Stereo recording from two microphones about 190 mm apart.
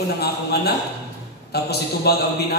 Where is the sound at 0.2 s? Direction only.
55° left (ahead or behind).